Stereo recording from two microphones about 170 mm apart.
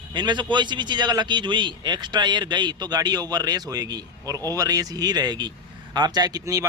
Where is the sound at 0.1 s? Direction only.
25° right (ahead or behind).